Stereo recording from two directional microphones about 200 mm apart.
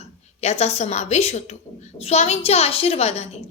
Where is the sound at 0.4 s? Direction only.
35° left (ahead or behind).